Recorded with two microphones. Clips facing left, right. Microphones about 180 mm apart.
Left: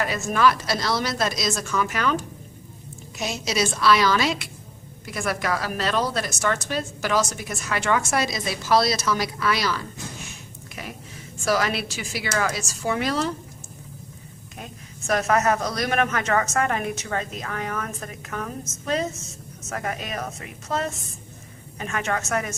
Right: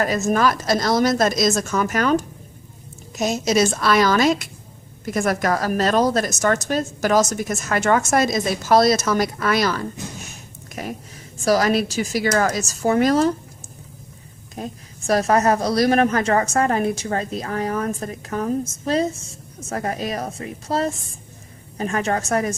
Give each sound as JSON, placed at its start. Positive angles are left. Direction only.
{"t": 0.0, "sound": "a woman's voice", "side_deg": -40}
{"t": 14.5, "sound": "a woman's voice", "side_deg": -35}